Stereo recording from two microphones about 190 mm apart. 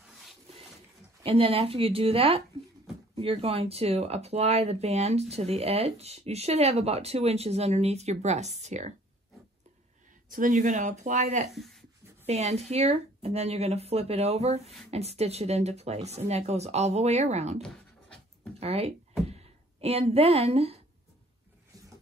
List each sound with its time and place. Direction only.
1.2 s speech: 30° right (ahead or behind)
10.3 s speech: 45° right (ahead or behind)
11.5 s speech: centre (ahead or behind)
12.3 s speech: 35° right (ahead or behind)
18.6 s a sound: 35° right (ahead or behind)